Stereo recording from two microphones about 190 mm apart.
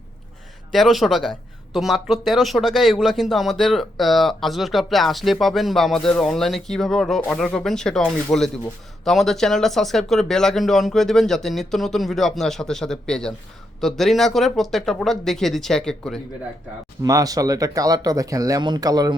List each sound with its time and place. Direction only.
0.7 s speech: centre (ahead or behind)
17.0 s speech: 20° right (ahead or behind)